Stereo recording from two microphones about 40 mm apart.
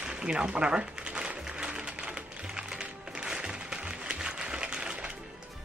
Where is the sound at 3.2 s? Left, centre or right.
Centre.